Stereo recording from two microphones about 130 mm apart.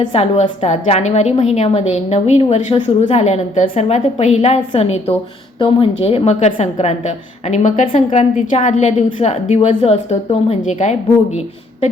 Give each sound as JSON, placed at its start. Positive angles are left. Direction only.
{"t": 0.1, "sound": "a woman's voice", "side_deg": 50}
{"t": 5.5, "sound": "a woman's voice", "side_deg": 45}